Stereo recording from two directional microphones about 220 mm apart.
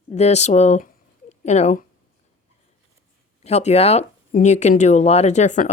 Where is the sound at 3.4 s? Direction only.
30° left (ahead or behind).